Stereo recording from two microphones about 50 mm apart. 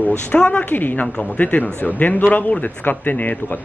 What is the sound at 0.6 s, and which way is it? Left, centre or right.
Speech, left.